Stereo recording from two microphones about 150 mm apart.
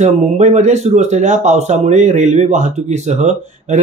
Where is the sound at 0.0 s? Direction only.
50° right (ahead or behind).